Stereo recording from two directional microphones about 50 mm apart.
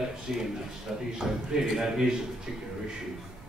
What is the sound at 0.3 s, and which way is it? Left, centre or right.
Speech, centre.